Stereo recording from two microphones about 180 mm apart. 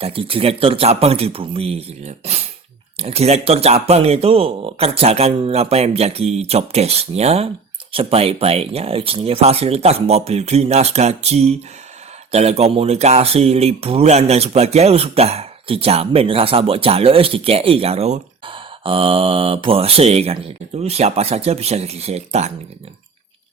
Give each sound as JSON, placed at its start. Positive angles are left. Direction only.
{"t": 0.0, "sound": "speech", "side_deg": -30}